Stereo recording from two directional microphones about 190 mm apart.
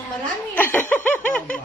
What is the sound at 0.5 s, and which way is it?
Laughter, 10° left (ahead or behind).